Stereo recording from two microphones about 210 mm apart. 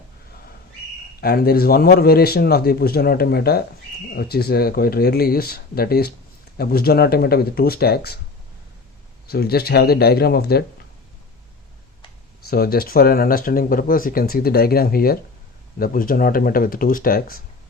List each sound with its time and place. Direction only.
1.2 s speech: 45° left (ahead or behind)
9.2 s speech: 50° left (ahead or behind)
12.5 s speech: 45° left (ahead or behind)